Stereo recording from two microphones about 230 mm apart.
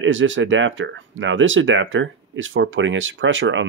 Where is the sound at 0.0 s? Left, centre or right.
Right.